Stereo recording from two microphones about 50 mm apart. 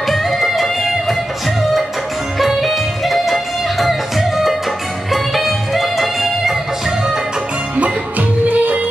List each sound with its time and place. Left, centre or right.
0.0 s music: centre
2.3 s music: centre
7.7 s music: right